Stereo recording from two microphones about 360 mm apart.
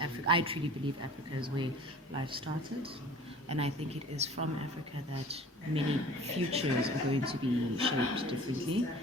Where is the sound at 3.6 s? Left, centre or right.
Centre.